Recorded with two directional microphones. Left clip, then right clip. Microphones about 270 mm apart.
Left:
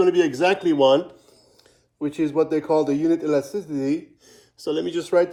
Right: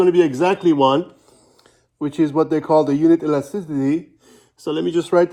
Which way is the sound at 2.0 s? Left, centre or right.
Right.